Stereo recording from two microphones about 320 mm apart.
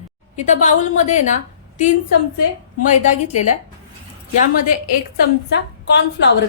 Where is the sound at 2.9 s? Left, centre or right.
Left.